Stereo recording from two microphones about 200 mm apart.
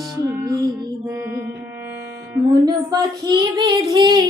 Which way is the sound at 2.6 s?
20° right (ahead or behind).